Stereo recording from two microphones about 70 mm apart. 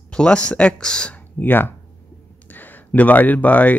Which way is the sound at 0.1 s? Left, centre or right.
Centre.